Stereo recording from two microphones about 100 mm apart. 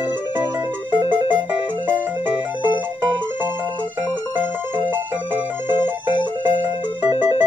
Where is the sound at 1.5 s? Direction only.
20° right (ahead or behind).